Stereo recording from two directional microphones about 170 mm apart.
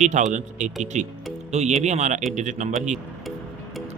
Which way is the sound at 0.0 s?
45° right (ahead or behind).